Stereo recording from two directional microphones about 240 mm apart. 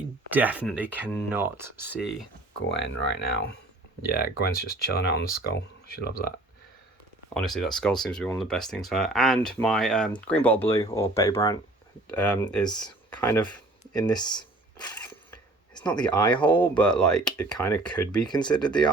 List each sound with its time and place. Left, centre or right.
0.3 s speech: centre
2.6 s speech: left
4.0 s speech: left
7.3 s speech: centre
16.0 s speech: centre
18.2 s speech: centre